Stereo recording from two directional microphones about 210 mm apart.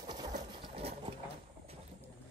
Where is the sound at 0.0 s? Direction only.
20° right (ahead or behind).